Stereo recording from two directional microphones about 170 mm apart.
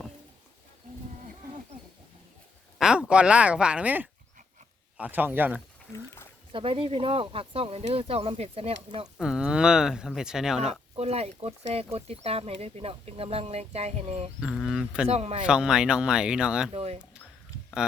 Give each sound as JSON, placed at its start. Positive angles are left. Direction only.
{"t": 2.7, "sound": "speech", "side_deg": -5}
{"t": 6.5, "sound": "speech", "side_deg": -30}
{"t": 9.1, "sound": "speech", "side_deg": -5}
{"t": 10.7, "sound": "speech", "side_deg": -40}
{"t": 14.4, "sound": "speech", "side_deg": 0}
{"t": 15.0, "sound": "speech", "side_deg": -35}
{"t": 15.4, "sound": "speech", "side_deg": -5}
{"t": 16.7, "sound": "speech", "side_deg": -35}